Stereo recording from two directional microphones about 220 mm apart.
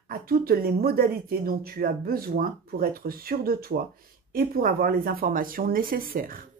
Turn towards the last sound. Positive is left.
turn(degrees=-40)  # may be behind; listen again after turning